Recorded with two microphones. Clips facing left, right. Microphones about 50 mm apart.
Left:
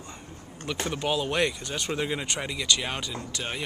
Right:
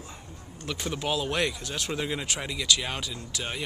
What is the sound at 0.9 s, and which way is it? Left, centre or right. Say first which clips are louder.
Speech: left 1 dB; centre.